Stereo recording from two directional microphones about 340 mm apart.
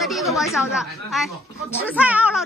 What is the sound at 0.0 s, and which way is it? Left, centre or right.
A child's voice, centre.